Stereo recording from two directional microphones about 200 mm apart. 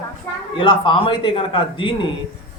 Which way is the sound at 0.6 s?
25° left (ahead or behind).